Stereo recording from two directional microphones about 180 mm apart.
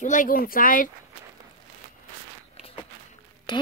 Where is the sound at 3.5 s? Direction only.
25° left (ahead or behind).